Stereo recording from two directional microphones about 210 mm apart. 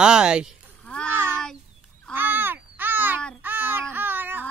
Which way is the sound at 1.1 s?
10° right (ahead or behind).